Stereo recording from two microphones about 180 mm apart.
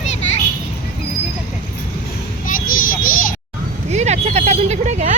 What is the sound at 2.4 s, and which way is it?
Children playing, 50° left (ahead or behind).